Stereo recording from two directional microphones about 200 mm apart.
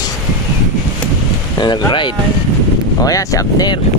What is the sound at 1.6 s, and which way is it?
Speech, 20° left (ahead or behind).